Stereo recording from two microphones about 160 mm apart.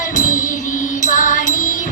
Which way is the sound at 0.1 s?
50° left (ahead or behind).